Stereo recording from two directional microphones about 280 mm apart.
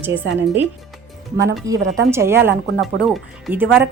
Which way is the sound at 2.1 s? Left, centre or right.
Centre.